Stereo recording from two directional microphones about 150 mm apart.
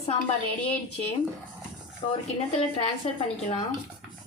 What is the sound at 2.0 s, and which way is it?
Speech, 40° left (ahead or behind).